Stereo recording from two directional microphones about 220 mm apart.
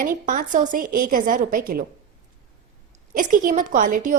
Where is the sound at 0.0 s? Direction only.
35° right (ahead or behind).